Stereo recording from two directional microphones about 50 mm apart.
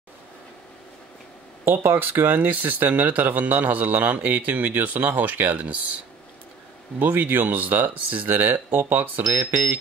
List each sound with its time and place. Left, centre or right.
1.7 s a man's voice: right
7.0 s a man's voice: right